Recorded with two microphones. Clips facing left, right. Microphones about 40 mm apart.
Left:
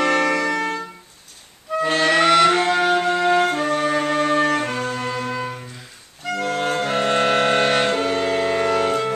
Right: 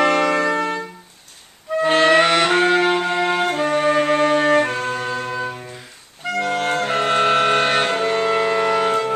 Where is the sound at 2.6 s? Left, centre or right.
Right.